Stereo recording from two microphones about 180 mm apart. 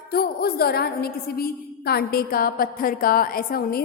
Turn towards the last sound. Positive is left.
turn(degrees=55)  # may be behind; listen again after turning